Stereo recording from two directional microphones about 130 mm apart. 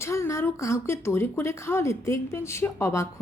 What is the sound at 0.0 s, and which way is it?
A woman's voice, 20° left (ahead or behind).